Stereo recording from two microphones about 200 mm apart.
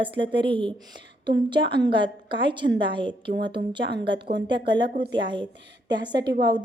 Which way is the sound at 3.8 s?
60° right (ahead or behind).